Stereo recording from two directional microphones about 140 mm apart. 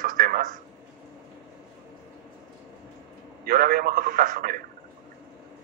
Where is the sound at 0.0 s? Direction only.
80° right.